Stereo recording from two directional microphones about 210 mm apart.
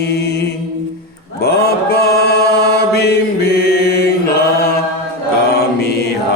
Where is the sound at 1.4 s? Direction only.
50° left (ahead or behind).